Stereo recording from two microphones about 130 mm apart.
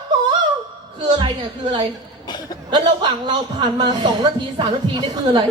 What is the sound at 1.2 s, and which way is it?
A man's voice, 35° right (ahead or behind).